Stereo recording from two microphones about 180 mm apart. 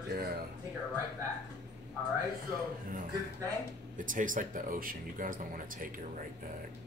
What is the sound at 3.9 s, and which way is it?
Speech, 50° right (ahead or behind).